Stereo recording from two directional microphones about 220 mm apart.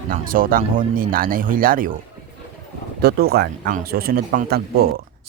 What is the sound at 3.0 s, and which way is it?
Speech, 45° right (ahead or behind).